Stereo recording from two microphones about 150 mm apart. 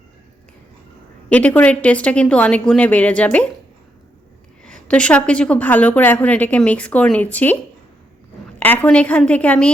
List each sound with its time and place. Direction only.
1.3 s a woman's voice: 10° left (ahead or behind)
4.6 s a woman's voice: 5° left (ahead or behind)